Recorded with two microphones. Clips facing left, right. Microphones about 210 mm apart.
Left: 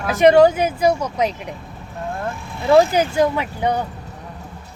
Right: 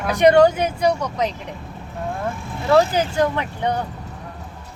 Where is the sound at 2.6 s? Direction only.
10° left (ahead or behind).